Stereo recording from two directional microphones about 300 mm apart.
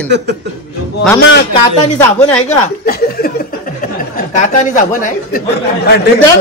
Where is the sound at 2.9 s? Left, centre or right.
Left.